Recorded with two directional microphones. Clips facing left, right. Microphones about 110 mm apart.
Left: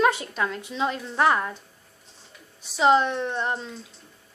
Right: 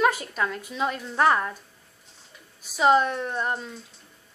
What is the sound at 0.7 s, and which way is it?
Speech, 5° right (ahead or behind).